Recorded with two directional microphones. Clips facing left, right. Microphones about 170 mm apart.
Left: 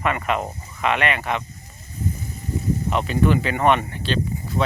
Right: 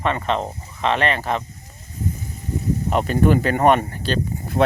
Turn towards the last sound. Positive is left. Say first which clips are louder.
# right 4 dB
turn(degrees=-50)  # may be behind; listen again after turning